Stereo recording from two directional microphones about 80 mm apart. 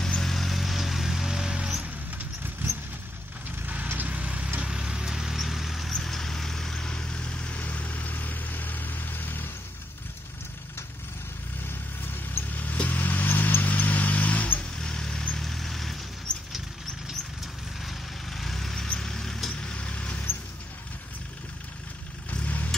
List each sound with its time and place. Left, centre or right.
0.0 s vehicle: centre
3.6 s vehicle: centre; by 9.5 s left
12.0 s vehicle: left; by 16.0 s centre
17.8 s vehicle: centre
22.3 s vehicle: centre